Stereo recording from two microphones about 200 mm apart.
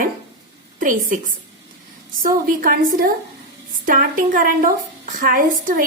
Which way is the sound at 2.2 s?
45° right (ahead or behind).